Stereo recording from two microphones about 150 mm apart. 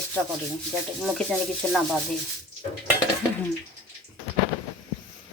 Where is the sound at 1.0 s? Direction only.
5° left (ahead or behind).